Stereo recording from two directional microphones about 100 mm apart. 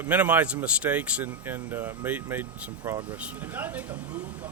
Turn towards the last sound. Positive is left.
turn(degrees=-15)  # may be behind; listen again after turning